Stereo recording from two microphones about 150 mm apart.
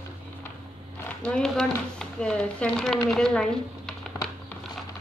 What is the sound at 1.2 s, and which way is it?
Speech, 5° left (ahead or behind).